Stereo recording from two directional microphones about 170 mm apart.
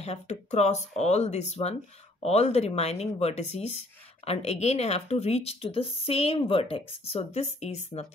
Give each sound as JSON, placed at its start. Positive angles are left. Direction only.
{"t": 0.0, "sound": "speech", "side_deg": 40}